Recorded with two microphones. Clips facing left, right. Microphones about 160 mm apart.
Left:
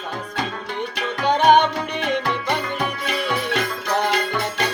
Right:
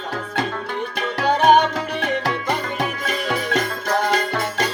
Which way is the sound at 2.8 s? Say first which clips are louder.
Even; 45° right (ahead or behind).